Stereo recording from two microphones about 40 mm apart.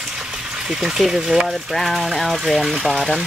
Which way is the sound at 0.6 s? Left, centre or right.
Centre.